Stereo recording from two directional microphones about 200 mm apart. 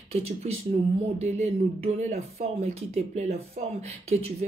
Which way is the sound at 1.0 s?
35° right (ahead or behind).